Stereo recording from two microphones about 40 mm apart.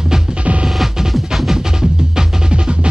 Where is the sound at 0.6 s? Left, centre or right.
Centre.